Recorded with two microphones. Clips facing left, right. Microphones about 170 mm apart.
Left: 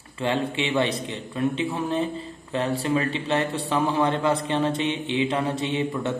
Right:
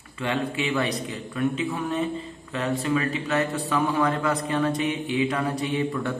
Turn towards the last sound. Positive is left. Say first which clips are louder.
# even
turn(degrees=25)  # may be behind; listen again after turning